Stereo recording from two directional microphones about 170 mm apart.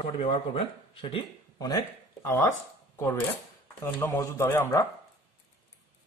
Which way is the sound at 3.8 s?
15° left (ahead or behind).